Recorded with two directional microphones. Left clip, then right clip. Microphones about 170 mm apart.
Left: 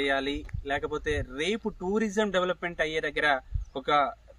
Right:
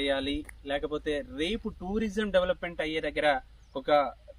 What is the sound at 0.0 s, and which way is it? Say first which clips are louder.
Speech: left 2 dB; 20° left (ahead or behind).